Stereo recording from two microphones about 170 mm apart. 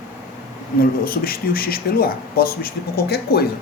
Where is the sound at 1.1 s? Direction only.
60° left (ahead or behind).